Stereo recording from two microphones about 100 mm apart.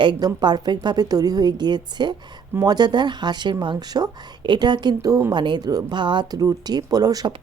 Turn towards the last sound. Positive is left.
turn(degrees=-40)  # may be behind; listen again after turning